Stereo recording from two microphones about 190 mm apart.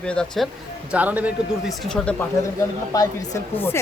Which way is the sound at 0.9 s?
10° right (ahead or behind).